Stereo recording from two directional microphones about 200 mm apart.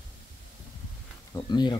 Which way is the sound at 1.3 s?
20° left (ahead or behind).